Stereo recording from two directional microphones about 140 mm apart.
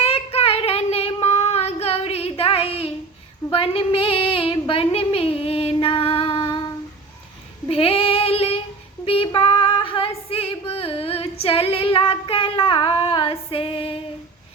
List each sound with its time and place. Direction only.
0.0 s child singing: 45° left (ahead or behind)
3.5 s a sound: 45° left (ahead or behind)
7.7 s child singing: 45° left (ahead or behind)
9.0 s female singing: 40° left (ahead or behind)